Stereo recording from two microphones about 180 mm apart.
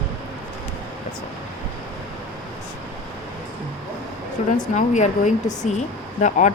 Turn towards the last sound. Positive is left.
turn(degrees=45)  # may be behind; listen again after turning